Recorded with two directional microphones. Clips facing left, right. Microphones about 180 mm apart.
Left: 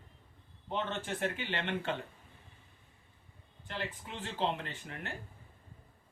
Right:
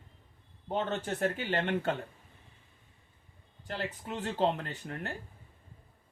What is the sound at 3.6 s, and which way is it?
Speech, 40° right (ahead or behind).